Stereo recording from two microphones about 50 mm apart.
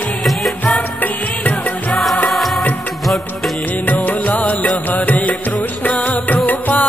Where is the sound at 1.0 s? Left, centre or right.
Left.